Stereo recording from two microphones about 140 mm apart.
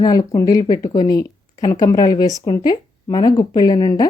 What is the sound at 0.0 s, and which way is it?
A woman's voice, 30° left (ahead or behind).